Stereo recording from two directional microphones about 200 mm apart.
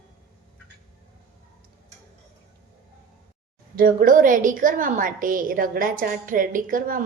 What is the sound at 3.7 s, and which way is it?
A woman's voice, 45° right (ahead or behind).